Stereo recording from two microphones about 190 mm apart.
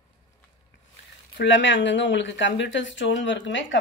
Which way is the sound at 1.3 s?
70° left (ahead or behind).